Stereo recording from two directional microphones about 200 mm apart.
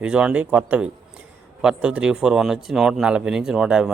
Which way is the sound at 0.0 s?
5° right (ahead or behind).